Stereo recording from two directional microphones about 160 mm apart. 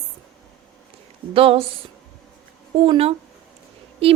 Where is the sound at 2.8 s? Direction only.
35° right (ahead or behind).